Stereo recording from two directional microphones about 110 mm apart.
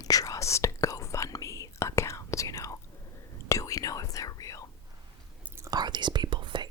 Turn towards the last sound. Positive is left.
turn(degrees=-45)  # may be behind; listen again after turning